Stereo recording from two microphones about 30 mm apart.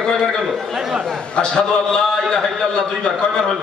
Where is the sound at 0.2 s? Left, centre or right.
Centre.